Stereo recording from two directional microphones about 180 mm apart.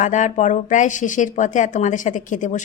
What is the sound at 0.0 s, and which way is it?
Speech, 45° left (ahead or behind).